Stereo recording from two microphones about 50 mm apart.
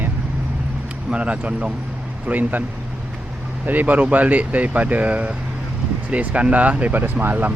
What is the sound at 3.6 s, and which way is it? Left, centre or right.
Speech, right.